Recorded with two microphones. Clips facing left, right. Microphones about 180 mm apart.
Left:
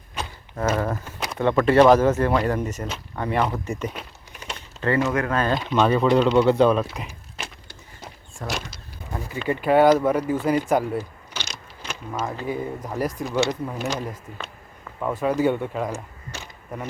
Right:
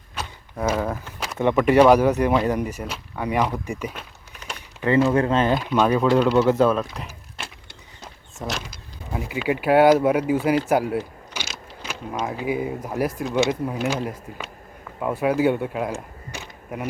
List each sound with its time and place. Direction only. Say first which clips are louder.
0.2 s mechanisms: even; 10° right (ahead or behind)
1.0 s a sound: left 1 dB; 10° left (ahead or behind)
1.6 s speech: even; 15° right (ahead or behind)
5.1 s speech: right 3 dB; 25° right (ahead or behind)
5.5 s speech: even; 10° right (ahead or behind)
8.4 s speech: even; 5° right (ahead or behind)